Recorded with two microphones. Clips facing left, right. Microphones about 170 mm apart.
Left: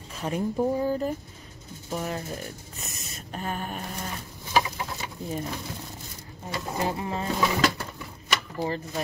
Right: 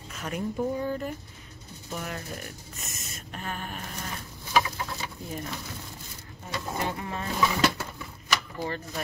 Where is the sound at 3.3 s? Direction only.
35° left (ahead or behind).